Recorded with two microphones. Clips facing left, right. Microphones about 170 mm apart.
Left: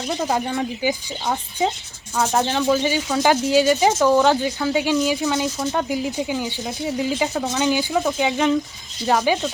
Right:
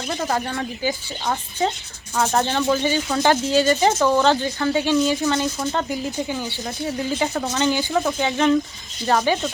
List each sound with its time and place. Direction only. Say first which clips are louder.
0.3 s speech: left 2 dB; 15° left (ahead or behind)
7.6 s speech: even; 15° left (ahead or behind)